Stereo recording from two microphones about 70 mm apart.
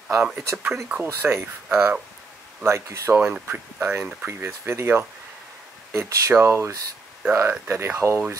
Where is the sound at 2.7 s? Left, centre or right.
Right.